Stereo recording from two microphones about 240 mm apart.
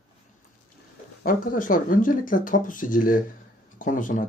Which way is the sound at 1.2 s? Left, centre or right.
Left.